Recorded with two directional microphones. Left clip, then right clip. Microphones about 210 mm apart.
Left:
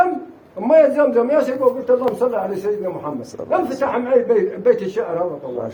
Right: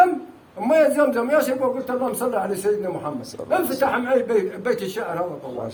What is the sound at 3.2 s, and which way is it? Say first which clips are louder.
Speech: left 3 dB; 5° left (ahead or behind).